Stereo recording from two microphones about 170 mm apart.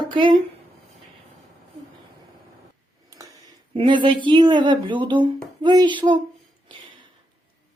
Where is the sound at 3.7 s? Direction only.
30° right (ahead or behind).